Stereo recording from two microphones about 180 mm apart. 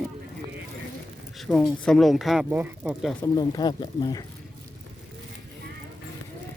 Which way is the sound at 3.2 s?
20° left (ahead or behind).